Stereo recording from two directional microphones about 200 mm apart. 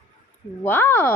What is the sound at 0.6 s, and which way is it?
Speech, 10° left (ahead or behind).